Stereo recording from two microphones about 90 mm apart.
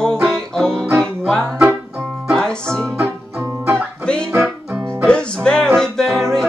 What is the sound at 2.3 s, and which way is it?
Music, 5° left (ahead or behind).